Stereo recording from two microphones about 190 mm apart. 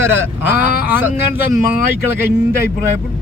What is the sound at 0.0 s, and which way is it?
Speech, 10° right (ahead or behind).